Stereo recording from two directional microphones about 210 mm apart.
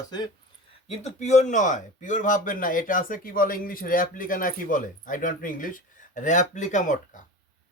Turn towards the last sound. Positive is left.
turn(degrees=35)  # may be behind; listen again after turning